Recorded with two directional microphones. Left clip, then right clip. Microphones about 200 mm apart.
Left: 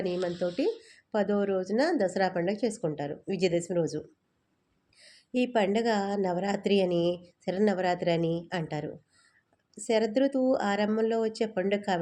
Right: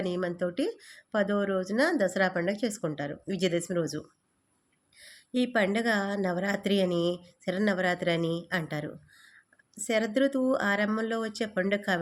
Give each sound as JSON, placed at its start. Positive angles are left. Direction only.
{"t": 0.0, "sound": "speech", "side_deg": -20}